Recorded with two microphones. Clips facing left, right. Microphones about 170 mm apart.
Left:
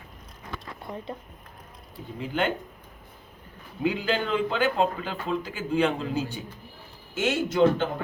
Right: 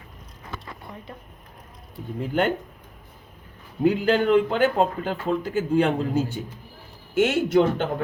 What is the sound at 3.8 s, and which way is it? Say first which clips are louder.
Speech: right 7 dB; 50° right (ahead or behind).